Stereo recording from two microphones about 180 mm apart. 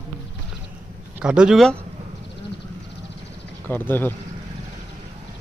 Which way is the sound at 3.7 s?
10° left (ahead or behind).